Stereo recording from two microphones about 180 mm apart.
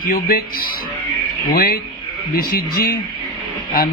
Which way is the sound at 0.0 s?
55° left (ahead or behind).